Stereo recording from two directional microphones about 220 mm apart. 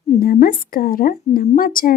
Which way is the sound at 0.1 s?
40° left (ahead or behind).